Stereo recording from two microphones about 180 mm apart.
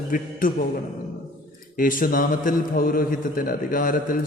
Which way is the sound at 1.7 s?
50° left (ahead or behind).